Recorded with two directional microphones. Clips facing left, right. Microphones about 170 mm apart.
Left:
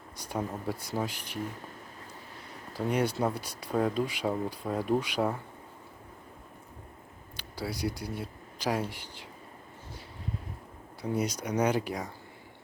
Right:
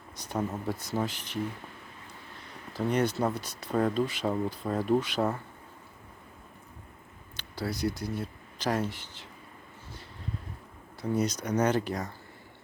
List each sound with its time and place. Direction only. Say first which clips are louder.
0.2 s speech: right 2 dB; 10° left (ahead or behind)
2.7 s speech: right 1 dB; 10° left (ahead or behind)
7.3 s speech: right 2 dB; 10° left (ahead or behind)
11.0 s speech: right 2 dB; 10° left (ahead or behind)